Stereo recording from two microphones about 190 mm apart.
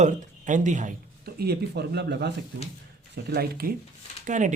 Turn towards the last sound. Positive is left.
turn(degrees=-40)  # may be behind; listen again after turning